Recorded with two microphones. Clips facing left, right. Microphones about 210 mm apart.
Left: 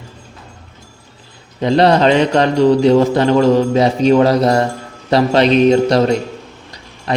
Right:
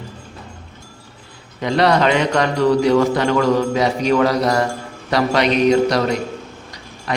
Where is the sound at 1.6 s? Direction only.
30° left (ahead or behind).